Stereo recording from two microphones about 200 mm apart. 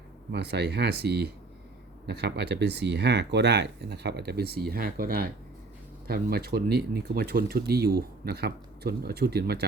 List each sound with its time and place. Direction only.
0.3 s speech: 55° right (ahead or behind)